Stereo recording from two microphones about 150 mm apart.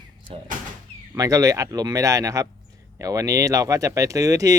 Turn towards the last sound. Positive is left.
turn(degrees=-20)  # may be behind; listen again after turning